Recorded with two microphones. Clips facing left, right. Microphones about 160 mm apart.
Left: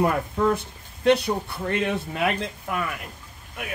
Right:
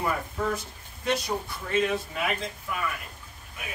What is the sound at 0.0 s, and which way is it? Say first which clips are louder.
Speech: left 7 dB; 60° left (ahead or behind).